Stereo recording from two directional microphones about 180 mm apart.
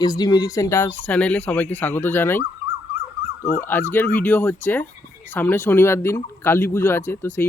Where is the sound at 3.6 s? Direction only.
10° left (ahead or behind).